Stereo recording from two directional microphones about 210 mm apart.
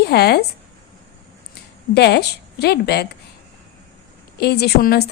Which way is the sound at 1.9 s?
50° left (ahead or behind).